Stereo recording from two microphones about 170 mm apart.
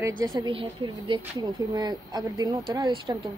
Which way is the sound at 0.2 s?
25° right (ahead or behind).